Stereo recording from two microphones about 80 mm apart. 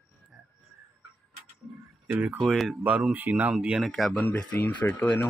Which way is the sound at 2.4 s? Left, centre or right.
Centre.